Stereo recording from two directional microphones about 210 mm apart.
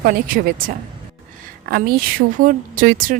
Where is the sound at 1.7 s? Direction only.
45° right (ahead or behind).